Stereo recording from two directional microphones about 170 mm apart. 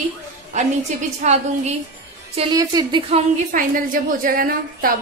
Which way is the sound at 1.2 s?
40° right (ahead or behind).